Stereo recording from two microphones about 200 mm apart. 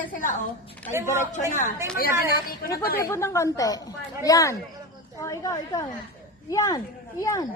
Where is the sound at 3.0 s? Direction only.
15° left (ahead or behind).